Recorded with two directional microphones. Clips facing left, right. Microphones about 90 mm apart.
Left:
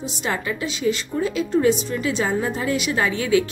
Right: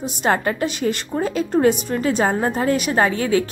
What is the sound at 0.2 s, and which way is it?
A woman's voice, 50° right (ahead or behind).